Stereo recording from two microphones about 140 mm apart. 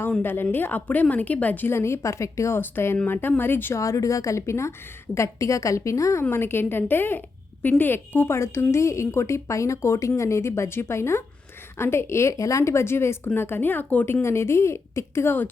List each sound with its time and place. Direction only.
0.0 s a woman's voice: 15° left (ahead or behind)